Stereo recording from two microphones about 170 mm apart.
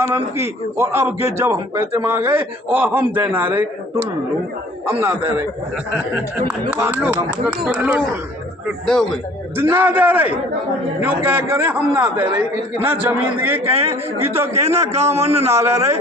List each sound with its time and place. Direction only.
0.0 s a man's voice: 15° right (ahead or behind)
5.3 s a man's voice: 10° right (ahead or behind)
9.6 s a man's voice: 10° right (ahead or behind)
13.7 s a man's voice: 35° right (ahead or behind)